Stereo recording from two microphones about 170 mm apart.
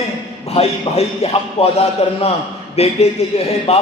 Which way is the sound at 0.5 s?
40° left (ahead or behind).